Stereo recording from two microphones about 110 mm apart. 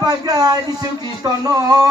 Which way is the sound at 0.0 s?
35° right (ahead or behind).